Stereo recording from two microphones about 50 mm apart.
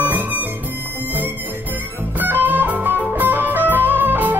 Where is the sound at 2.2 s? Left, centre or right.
Right.